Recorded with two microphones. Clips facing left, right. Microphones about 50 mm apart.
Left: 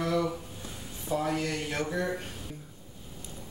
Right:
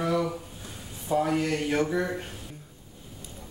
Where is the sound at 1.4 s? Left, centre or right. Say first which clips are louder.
Right 6 dB; right.